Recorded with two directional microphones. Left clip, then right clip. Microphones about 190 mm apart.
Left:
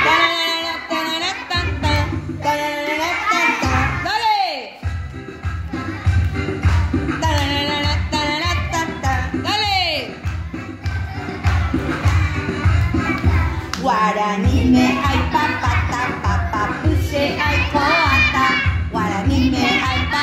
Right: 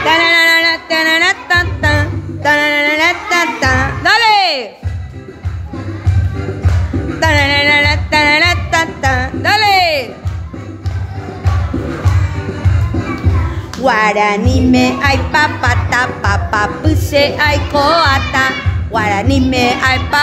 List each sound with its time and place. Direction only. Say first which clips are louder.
0.3 s music: right 11 dB; 40° right (ahead or behind)
2.4 s music: right 9 dB; 45° right (ahead or behind)
7.2 s music: right 11 dB; 45° right (ahead or behind)
13.8 s music: right 6 dB; 45° right (ahead or behind)